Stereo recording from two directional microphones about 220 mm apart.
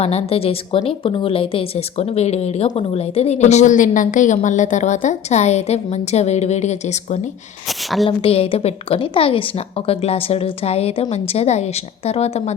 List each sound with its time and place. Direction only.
0.0 s a woman's voice: 30° left (ahead or behind)
7.7 s a woman's voice: centre (ahead or behind)
8.0 s a woman's voice: 25° left (ahead or behind)